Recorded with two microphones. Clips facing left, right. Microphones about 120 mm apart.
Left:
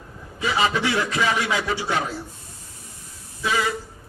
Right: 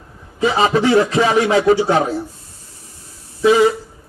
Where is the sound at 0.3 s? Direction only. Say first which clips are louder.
Right 7 dB; 30° right (ahead or behind).